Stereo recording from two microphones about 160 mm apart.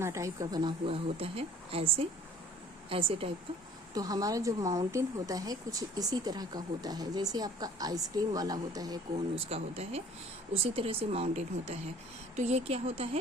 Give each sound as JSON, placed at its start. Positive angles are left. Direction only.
{"t": 0.0, "sound": "a woman's voice", "side_deg": -20}
{"t": 3.9, "sound": "speech", "side_deg": -25}
{"t": 9.5, "sound": "a woman's voice", "side_deg": -40}